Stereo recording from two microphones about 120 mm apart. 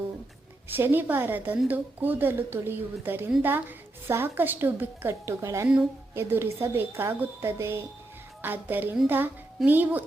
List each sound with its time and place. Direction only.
0.8 s a woman's voice: 15° right (ahead or behind)